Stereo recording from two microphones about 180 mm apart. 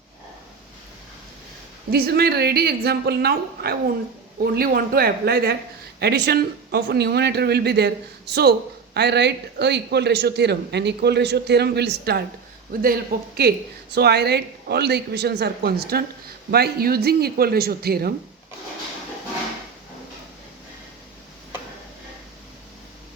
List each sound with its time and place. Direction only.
1.9 s a man's voice: 60° right (ahead or behind)